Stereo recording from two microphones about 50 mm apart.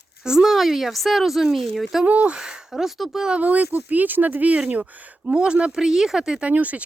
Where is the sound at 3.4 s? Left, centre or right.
Right; by 6.4 s centre.